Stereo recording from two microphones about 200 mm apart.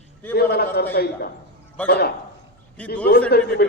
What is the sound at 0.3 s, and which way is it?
A man's voice, 55° left (ahead or behind).